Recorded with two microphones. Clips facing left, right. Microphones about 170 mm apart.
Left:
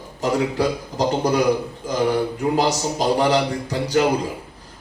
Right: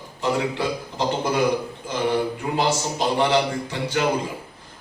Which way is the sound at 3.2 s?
40° left (ahead or behind).